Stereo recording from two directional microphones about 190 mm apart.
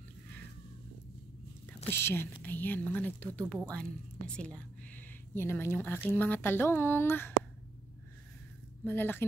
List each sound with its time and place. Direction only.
1.9 s speech: 10° left (ahead or behind)
8.8 s speech: 10° left (ahead or behind)